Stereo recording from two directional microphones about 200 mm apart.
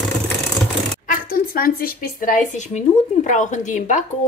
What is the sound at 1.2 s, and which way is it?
A woman's voice, 45° left (ahead or behind).